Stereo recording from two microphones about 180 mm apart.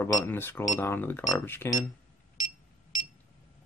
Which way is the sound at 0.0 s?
10° left (ahead or behind).